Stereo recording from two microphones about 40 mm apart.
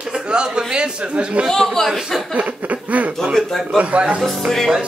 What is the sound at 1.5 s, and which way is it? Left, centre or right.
Music, centre.